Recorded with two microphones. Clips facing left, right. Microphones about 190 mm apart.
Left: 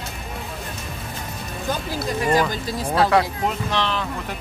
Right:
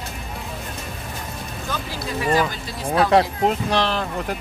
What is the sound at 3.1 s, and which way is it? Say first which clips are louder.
Speech: right 3 dB; 35° right (ahead or behind).